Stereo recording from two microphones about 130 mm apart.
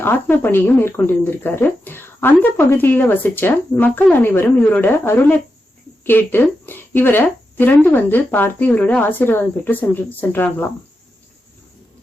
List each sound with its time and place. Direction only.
0.0 s a woman's voice: 15° left (ahead or behind)